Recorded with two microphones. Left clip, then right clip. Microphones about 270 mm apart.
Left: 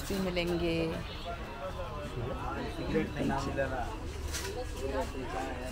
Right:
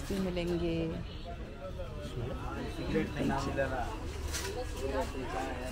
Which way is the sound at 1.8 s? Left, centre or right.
Centre.